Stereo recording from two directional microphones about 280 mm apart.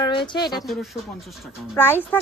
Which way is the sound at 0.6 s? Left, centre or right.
Centre.